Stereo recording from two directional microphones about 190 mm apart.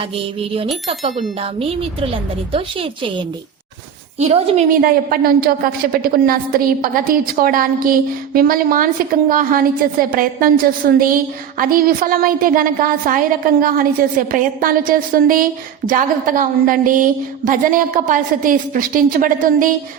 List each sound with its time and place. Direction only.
0.9 s a woman's voice: 30° right (ahead or behind)
4.8 s a woman's voice: 50° right (ahead or behind)